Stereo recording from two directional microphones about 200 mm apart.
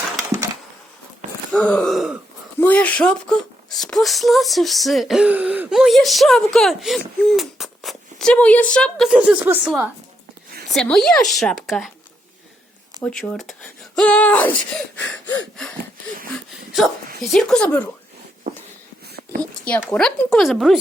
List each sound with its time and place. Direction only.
1.5 s speech: 5° left (ahead or behind)
13.0 s speech: 5° left (ahead or behind)
14.9 s wheeze: 5° left (ahead or behind)
17.3 s wheeze: 5° left (ahead or behind)
19.0 s a sound: 50° right (ahead or behind)
19.9 s speech: 5° left (ahead or behind)